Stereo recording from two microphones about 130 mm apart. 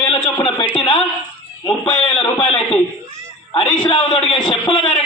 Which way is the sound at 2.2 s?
45° left (ahead or behind).